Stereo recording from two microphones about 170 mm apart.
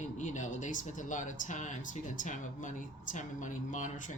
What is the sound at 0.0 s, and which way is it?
Speech, 45° left (ahead or behind).